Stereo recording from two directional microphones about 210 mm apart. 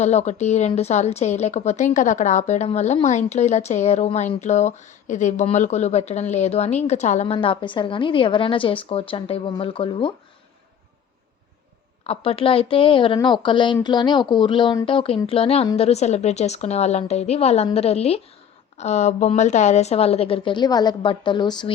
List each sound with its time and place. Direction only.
0.0 s speech: 30° left (ahead or behind)
12.0 s speech: 25° left (ahead or behind)